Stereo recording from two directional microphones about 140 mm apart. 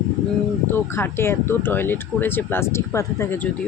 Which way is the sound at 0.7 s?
15° left (ahead or behind).